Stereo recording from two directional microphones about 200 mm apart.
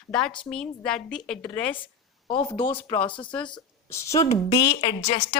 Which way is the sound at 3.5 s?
15° left (ahead or behind).